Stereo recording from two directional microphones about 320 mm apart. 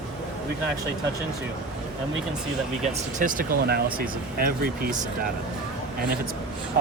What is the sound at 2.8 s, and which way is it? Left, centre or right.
Speech, right.